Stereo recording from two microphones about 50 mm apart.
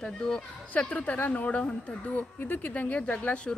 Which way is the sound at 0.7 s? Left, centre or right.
Left.